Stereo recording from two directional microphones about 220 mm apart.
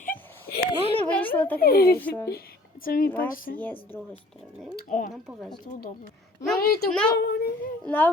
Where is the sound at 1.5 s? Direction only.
45° left (ahead or behind).